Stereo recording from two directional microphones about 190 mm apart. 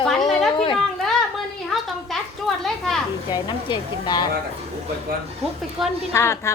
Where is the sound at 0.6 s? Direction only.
25° left (ahead or behind).